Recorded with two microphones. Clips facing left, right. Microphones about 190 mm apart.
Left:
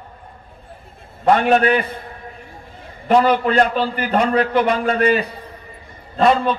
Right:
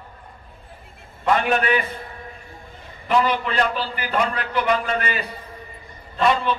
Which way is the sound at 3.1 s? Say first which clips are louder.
Left 6 dB; 40° left (ahead or behind).